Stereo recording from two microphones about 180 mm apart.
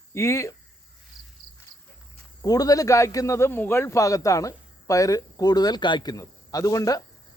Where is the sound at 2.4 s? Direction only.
20° left (ahead or behind).